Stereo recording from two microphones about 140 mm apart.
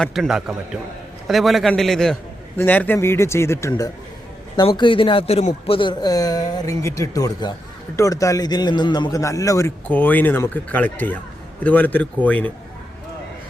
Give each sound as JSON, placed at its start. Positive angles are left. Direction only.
{"t": 0.0, "sound": "a man's voice", "side_deg": 0}
{"t": 4.5, "sound": "a man's voice", "side_deg": 35}